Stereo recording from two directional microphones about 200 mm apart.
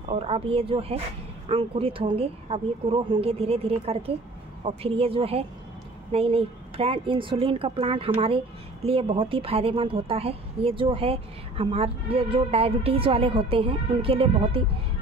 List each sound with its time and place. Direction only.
0.1 s a woman's voice: 30° right (ahead or behind)